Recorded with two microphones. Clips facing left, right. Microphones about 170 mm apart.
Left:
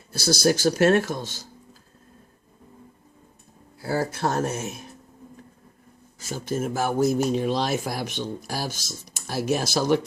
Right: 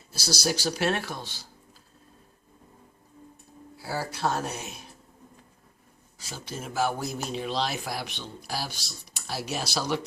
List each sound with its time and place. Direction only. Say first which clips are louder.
0.1 s speech: left 8 dB; 50° left (ahead or behind)
3.8 s speech: left 6 dB; 50° left (ahead or behind)
6.1 s speech: left 10 dB; 50° left (ahead or behind)